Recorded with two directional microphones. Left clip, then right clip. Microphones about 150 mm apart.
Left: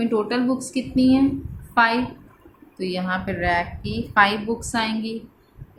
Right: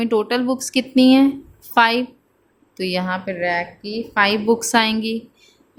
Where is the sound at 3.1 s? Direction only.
35° right (ahead or behind).